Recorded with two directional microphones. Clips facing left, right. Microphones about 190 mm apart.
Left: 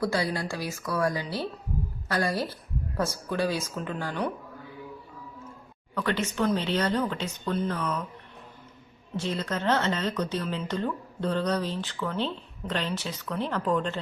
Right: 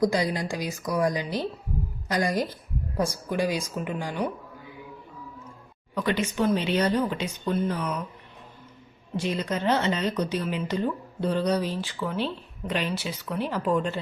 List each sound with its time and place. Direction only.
0.0 s speech: 15° right (ahead or behind)
5.9 s speech: 15° right (ahead or behind)
9.1 s speech: 10° right (ahead or behind)